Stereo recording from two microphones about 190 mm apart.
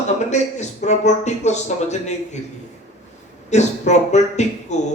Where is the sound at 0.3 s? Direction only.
35° left (ahead or behind).